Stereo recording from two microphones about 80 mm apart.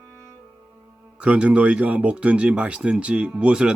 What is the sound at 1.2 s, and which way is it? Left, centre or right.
Speech, centre.